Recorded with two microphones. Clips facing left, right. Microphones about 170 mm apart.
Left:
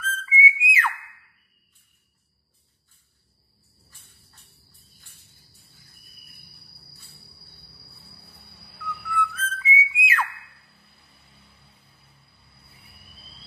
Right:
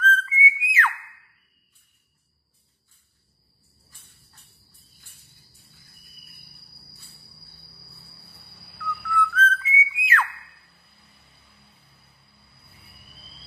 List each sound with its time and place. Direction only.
0.0 s whistle: 10° left (ahead or behind)
9.1 s whistling: 10° left (ahead or behind)
10.0 s a sound: 10° left (ahead or behind)